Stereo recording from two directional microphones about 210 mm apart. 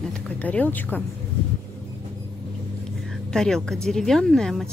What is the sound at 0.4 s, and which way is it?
Speech, 5° left (ahead or behind).